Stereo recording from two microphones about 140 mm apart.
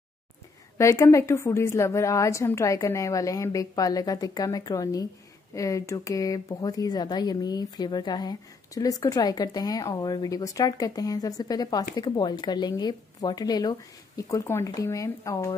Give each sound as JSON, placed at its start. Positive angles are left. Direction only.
{"t": 0.7, "sound": "speech", "side_deg": 20}